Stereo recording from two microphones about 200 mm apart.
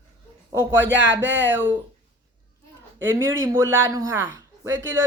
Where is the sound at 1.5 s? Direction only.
10° right (ahead or behind).